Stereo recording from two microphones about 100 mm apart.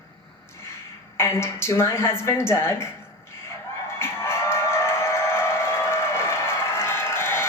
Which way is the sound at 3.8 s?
25° left (ahead or behind).